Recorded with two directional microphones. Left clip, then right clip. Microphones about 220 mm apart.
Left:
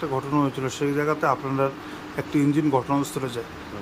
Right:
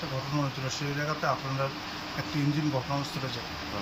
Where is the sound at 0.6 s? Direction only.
20° left (ahead or behind).